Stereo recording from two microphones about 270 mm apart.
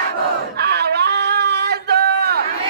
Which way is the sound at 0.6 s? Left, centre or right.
Right.